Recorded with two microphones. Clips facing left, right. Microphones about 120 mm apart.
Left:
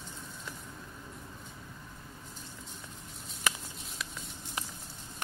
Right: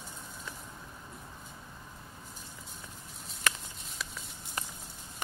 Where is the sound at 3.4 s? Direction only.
Centre (ahead or behind).